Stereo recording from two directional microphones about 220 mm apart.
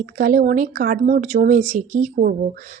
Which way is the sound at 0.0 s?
40° right (ahead or behind).